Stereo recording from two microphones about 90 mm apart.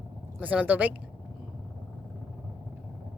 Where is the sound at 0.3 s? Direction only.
15° right (ahead or behind).